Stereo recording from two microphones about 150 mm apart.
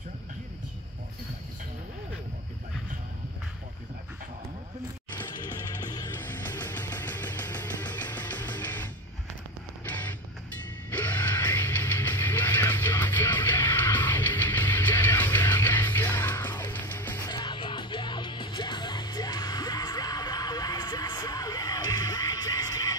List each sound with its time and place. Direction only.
5.4 s music: 25° left (ahead or behind)
6.2 s music: 15° left (ahead or behind)
10.9 s music: 10° left (ahead or behind)
17.3 s music: 30° left (ahead or behind)